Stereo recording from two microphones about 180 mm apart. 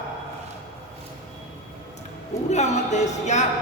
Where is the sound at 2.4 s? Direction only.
40° left (ahead or behind).